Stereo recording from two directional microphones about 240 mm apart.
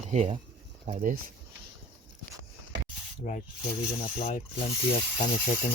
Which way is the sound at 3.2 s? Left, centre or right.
Left.